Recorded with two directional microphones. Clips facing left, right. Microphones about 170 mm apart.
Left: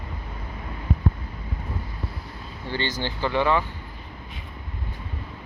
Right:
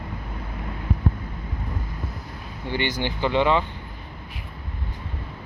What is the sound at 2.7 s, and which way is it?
Speech, 15° right (ahead or behind).